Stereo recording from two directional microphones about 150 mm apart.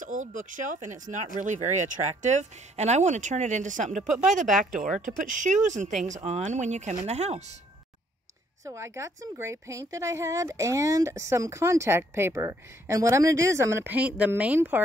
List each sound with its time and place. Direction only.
0.0 s speech: 60° right (ahead or behind)
4.1 s speech: centre (ahead or behind)
5.0 s speech: 60° right (ahead or behind)
8.6 s speech: 20° right (ahead or behind)